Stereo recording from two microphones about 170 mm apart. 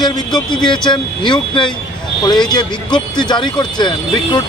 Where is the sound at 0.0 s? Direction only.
25° left (ahead or behind).